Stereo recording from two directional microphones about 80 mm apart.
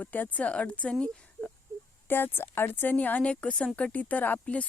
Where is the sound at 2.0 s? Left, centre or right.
Left.